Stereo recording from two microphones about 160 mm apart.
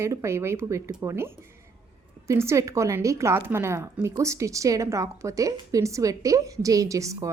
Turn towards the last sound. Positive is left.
turn(degrees=-20)  # may be behind; listen again after turning